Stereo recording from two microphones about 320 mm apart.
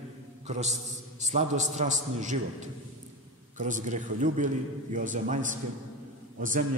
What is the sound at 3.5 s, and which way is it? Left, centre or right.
A man's voice, right.